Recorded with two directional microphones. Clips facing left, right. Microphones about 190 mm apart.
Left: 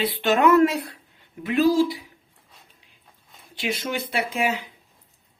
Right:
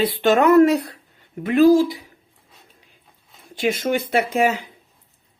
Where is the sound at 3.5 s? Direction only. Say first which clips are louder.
Right 7 dB; 45° right (ahead or behind).